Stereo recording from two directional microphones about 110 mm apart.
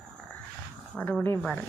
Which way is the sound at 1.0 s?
10° left (ahead or behind).